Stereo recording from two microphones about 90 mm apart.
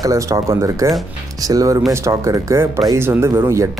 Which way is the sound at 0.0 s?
35° right (ahead or behind).